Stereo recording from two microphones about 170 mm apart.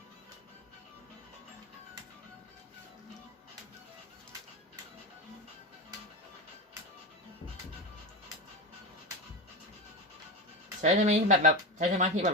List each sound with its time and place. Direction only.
10.8 s speech: 45° right (ahead or behind)